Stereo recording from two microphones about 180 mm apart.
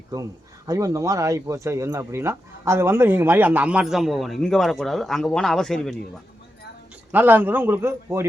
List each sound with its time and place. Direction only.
0.1 s speech: 20° right (ahead or behind); by 6.0 s 5° left (ahead or behind)
7.1 s speech: 10° right (ahead or behind)